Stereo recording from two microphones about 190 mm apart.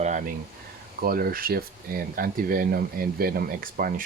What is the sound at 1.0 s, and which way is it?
Speech, 50° right (ahead or behind).